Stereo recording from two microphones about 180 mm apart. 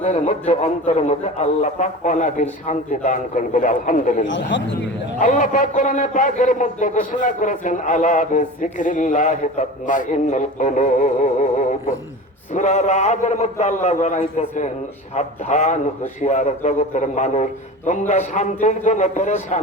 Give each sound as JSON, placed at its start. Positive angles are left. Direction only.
{"t": 0.0, "sound": "a man's voice", "side_deg": 40}
{"t": 4.3, "sound": "a man's voice", "side_deg": 90}
{"t": 5.2, "sound": "a man's voice", "side_deg": 45}